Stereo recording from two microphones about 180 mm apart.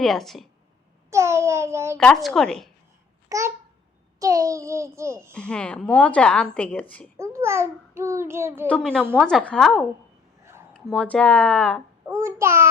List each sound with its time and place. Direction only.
0.0 s a woman's voice: centre (ahead or behind)
1.1 s a child's voice: 15° right (ahead or behind)
2.0 s a woman's voice: 5° left (ahead or behind)
3.2 s babbling: 15° right (ahead or behind)
4.2 s a child's voice: 20° right (ahead or behind)
5.3 s speech: 5° left (ahead or behind)
7.2 s a child's voice: 15° right (ahead or behind)
8.6 s a woman's voice: 5° left (ahead or behind)
12.0 s a child's voice: 15° right (ahead or behind)